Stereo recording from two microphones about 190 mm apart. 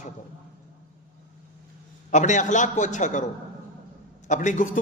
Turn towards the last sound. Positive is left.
turn(degrees=40)  # may be behind; listen again after turning